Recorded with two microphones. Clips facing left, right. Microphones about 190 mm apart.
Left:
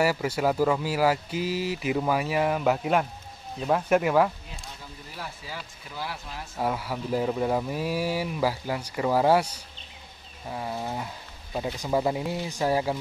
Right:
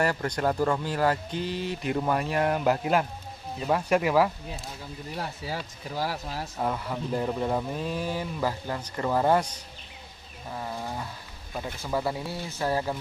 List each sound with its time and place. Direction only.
0.0 s speech: 5° left (ahead or behind)
5.1 s speech: 35° right (ahead or behind)
6.6 s speech: 5° left (ahead or behind)